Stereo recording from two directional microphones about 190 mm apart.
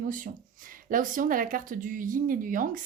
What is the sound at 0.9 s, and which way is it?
A woman's voice, 45° right (ahead or behind).